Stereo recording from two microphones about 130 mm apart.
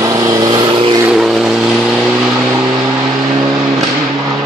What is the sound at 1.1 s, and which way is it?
Vehicle, 5° right (ahead or behind).